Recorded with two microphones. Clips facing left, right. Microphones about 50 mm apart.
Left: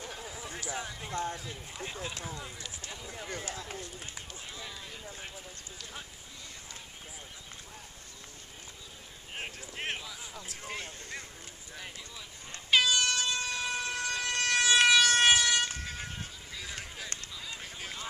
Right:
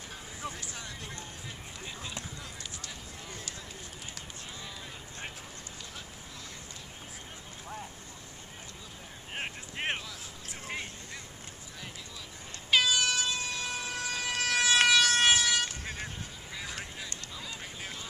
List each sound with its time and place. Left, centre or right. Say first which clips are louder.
0.5 s speech: left 5 dB; centre
3.3 s speech: left 4 dB; left
9.3 s boat: right 2 dB; right
10.5 s vehicle: right 3 dB; right
12.7 s air horn: even; centre
14.9 s vehicle: left 1 dB; centre
17.6 s a sound: even; centre